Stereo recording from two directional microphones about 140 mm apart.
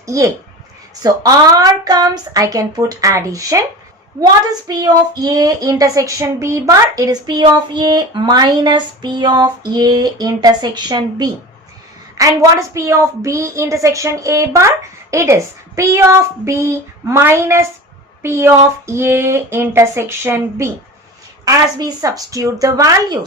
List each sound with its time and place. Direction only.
0.0 s speech: 25° right (ahead or behind)
1.0 s child singing: 25° right (ahead or behind)
4.7 s child singing: 25° right (ahead or behind)
18.2 s speech: 20° right (ahead or behind)
21.4 s child singing: 25° right (ahead or behind)